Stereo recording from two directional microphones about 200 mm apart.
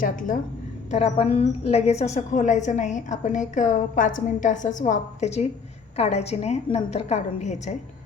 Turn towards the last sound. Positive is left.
turn(degrees=35)  # may be behind; listen again after turning